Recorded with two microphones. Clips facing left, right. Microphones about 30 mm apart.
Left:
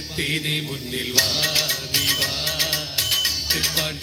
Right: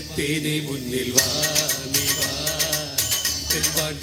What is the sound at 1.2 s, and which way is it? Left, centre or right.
Music, left.